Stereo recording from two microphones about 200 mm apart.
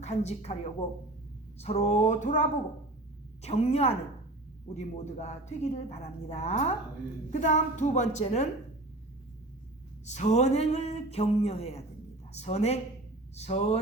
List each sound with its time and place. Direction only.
0.0 s a woman's voice: 35° left (ahead or behind)
10.1 s a woman's voice: 35° left (ahead or behind)